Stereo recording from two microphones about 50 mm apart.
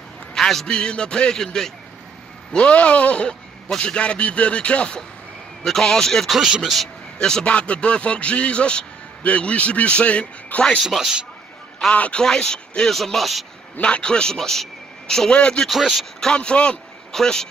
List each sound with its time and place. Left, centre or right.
0.3 s a man's voice: centre
2.5 s a man's voice: left
5.6 s a man's voice: centre
6.3 s speech: centre
7.2 s a man's voice: centre
10.8 s speech: centre
11.9 s a man's voice: left
12.2 s a man's voice: centre
13.7 s a man's voice: left
15.3 s a man's voice: centre
15.7 s speech: centre
16.2 s a man's voice: centre